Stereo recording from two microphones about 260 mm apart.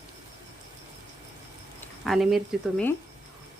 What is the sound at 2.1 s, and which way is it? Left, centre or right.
Speech, centre.